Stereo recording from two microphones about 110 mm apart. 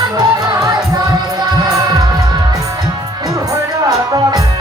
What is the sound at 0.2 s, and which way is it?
Music, 35° right (ahead or behind).